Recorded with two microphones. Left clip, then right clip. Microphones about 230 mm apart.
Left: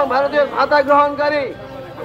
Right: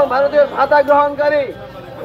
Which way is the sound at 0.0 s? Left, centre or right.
Left.